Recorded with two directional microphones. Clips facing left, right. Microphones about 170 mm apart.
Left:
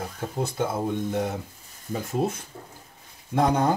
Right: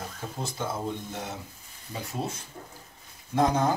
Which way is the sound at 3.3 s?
60° left (ahead or behind).